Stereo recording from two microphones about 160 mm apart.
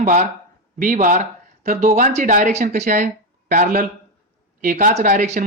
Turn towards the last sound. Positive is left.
turn(degrees=-50)  # may be behind; listen again after turning